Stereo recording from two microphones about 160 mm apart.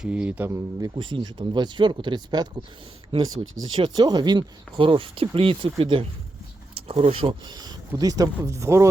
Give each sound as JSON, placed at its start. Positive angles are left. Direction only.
{"t": 0.0, "sound": "a man's voice", "side_deg": -5}
{"t": 0.9, "sound": "a man's voice", "side_deg": -30}